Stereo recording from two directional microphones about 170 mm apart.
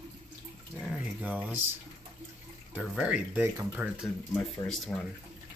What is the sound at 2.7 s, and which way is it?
Speech, 5° right (ahead or behind).